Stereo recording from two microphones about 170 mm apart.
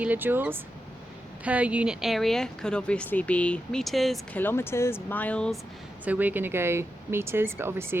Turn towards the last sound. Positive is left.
turn(degrees=-15)  # may be behind; listen again after turning